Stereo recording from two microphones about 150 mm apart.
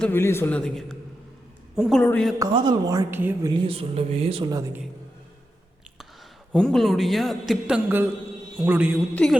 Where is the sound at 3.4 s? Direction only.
30° right (ahead or behind).